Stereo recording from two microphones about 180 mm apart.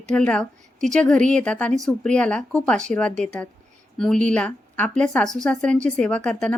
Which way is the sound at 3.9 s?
5° left (ahead or behind).